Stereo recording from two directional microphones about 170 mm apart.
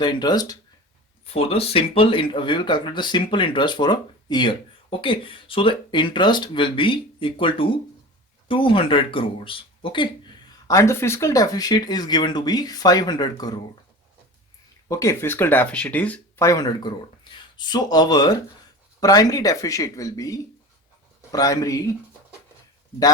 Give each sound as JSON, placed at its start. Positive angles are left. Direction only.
{"t": 0.0, "sound": "speech", "side_deg": 25}
{"t": 1.3, "sound": "speech", "side_deg": 35}
{"t": 10.7, "sound": "speech", "side_deg": 15}
{"t": 14.8, "sound": "speech", "side_deg": 20}
{"t": 16.5, "sound": "speech", "side_deg": 20}